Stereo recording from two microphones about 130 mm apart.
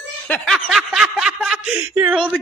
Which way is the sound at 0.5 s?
Centre (ahead or behind).